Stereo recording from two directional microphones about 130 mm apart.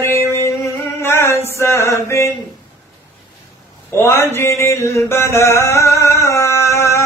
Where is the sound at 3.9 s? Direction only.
20° left (ahead or behind).